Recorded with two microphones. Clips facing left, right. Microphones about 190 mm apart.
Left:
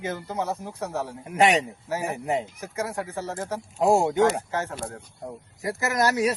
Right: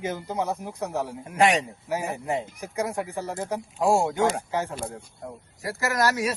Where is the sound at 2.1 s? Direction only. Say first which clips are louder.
Left 2 dB; 20° left (ahead or behind).